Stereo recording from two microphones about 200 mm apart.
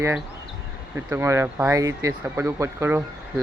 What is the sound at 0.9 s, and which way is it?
Speech, 15° right (ahead or behind).